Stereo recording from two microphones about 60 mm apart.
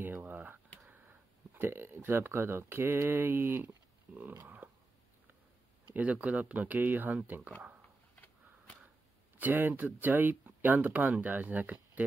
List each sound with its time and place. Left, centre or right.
0.0 s speech: right
5.9 s speech: right
9.4 s speech: right